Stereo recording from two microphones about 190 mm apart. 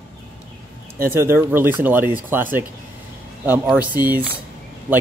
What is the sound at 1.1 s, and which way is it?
Speech, 10° right (ahead or behind).